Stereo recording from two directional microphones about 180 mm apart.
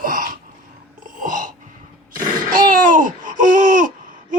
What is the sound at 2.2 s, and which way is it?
Babbling, 50° right (ahead or behind).